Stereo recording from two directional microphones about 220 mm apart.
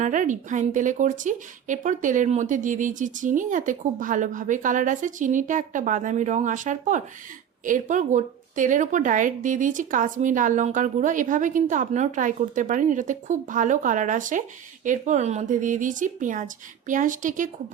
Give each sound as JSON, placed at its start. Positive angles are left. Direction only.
{"t": 0.0, "sound": "speech", "side_deg": -35}